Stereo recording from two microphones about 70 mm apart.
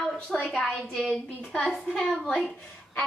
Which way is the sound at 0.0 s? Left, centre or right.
Centre.